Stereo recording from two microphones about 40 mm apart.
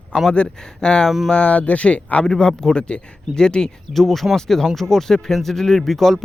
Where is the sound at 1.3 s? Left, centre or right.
Left.